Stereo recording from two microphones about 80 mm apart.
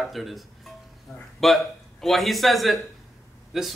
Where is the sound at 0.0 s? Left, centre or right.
Centre.